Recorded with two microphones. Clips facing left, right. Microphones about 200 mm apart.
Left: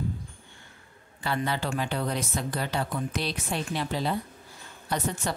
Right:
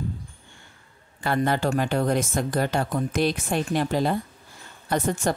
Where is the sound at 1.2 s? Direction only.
50° right (ahead or behind).